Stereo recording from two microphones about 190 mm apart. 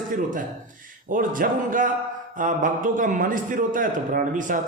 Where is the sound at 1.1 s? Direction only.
45° right (ahead or behind).